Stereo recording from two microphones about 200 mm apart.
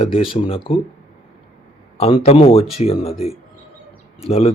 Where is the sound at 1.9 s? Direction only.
30° left (ahead or behind).